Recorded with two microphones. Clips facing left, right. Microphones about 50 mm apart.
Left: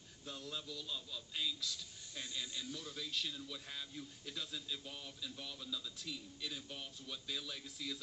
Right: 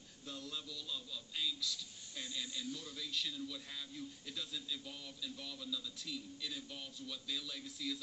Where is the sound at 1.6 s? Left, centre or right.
Left.